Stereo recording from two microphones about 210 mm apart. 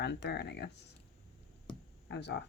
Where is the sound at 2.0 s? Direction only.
55° left (ahead or behind).